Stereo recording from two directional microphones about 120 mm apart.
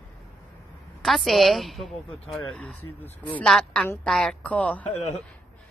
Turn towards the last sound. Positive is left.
turn(degrees=10)  # may be behind; listen again after turning